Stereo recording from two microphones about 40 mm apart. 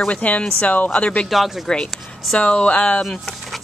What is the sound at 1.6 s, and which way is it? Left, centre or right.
Speech, left.